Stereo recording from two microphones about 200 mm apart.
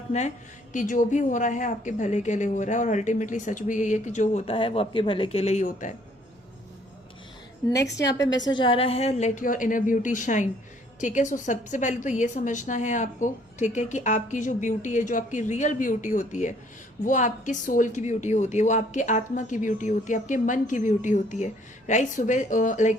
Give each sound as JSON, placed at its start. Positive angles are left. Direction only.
{"t": 0.1, "sound": "a woman's voice", "side_deg": 35}
{"t": 7.8, "sound": "a woman's voice", "side_deg": 60}
{"t": 8.4, "sound": "a woman's voice", "side_deg": 25}